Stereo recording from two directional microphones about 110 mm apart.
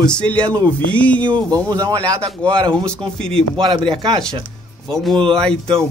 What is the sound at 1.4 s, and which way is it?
Speech, 35° right (ahead or behind).